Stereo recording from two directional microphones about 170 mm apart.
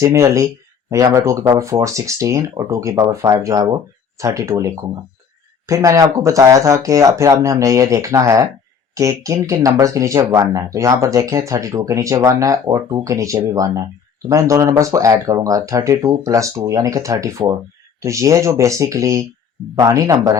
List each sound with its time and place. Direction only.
0.0 s speech: 20° right (ahead or behind)